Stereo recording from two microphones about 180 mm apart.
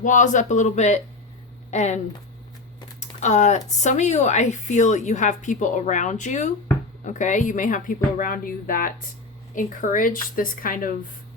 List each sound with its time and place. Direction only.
0.0 s a woman's voice: 45° left (ahead or behind)
3.0 s typing: 40° left (ahead or behind)
3.8 s a woman's voice: 40° left (ahead or behind)